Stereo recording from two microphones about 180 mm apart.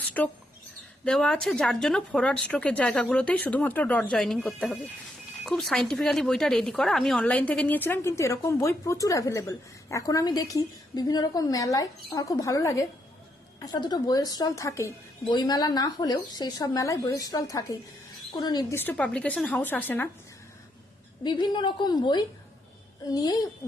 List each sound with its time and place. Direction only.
0.2 s a woman's voice: 5° left (ahead or behind)
18.8 s speech: 10° left (ahead or behind)
21.2 s a woman's voice: 25° left (ahead or behind)